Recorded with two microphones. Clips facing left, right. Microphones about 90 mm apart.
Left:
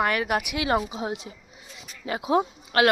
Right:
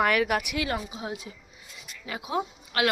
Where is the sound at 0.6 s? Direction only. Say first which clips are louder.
Left 6 dB; 25° left (ahead or behind).